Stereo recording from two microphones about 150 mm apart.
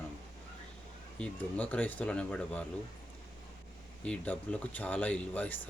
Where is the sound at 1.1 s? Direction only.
10° left (ahead or behind).